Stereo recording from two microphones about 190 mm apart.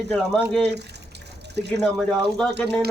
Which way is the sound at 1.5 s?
60° right (ahead or behind).